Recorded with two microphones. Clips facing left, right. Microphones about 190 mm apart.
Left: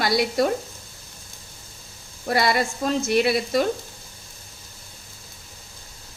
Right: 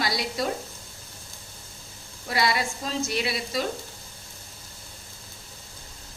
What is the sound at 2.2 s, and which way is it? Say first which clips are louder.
A woman's voice: left 5 dB; 50° left (ahead or behind).